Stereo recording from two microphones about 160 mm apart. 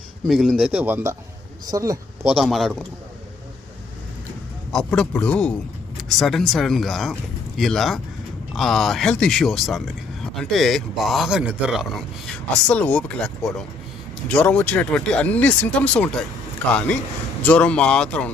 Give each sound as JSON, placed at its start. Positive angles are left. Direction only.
{"t": 0.3, "sound": "a man's voice", "side_deg": 0}
{"t": 2.2, "sound": "speech", "side_deg": -5}
{"t": 4.7, "sound": "speech", "side_deg": 5}